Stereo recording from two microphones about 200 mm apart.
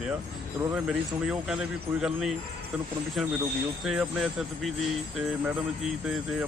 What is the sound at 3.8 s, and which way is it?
Speech, centre (ahead or behind).